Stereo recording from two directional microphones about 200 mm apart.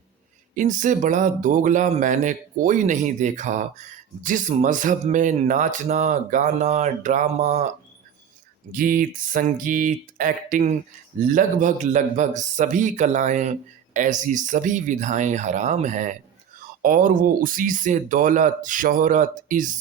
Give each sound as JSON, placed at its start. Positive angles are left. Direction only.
{"t": 0.5, "sound": "speech", "side_deg": -40}
{"t": 8.7, "sound": "speech", "side_deg": -45}